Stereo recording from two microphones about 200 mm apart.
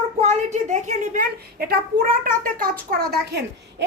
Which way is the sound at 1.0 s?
45° right (ahead or behind).